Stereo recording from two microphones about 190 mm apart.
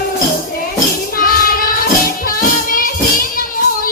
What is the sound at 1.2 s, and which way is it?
Child singing, 50° left (ahead or behind).